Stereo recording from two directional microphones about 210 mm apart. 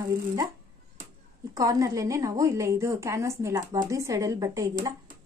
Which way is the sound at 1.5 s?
15° right (ahead or behind).